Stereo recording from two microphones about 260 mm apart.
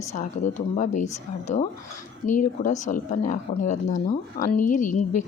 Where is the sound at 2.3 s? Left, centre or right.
Left.